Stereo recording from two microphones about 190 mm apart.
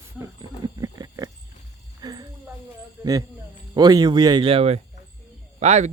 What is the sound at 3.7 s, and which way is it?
Speech, 20° right (ahead or behind).